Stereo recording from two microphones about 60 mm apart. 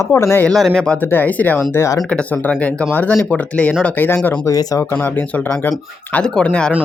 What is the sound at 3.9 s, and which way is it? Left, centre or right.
Speech, left.